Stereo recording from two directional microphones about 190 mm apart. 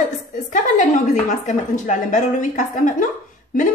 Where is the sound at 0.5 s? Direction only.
40° left (ahead or behind).